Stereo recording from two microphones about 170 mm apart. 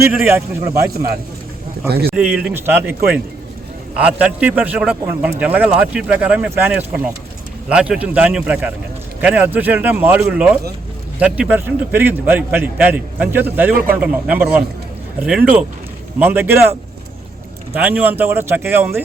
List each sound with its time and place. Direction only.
0.1 s a man's voice: 10° right (ahead or behind)
1.9 s speech: 70° right (ahead or behind)
2.1 s a man's voice: 5° right (ahead or behind)
17.7 s a man's voice: 10° right (ahead or behind)